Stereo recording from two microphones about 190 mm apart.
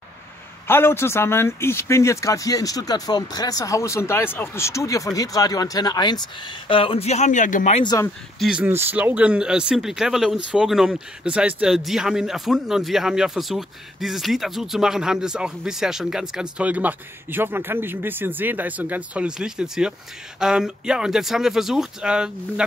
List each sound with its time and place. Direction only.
0.7 s speech: 10° left (ahead or behind); by 7.8 s 40° left (ahead or behind)
7.8 s speech: 20° left (ahead or behind)
8.4 s a man's voice: 5° right (ahead or behind)